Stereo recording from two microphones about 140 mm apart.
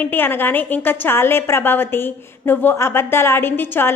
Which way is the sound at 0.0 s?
15° left (ahead or behind).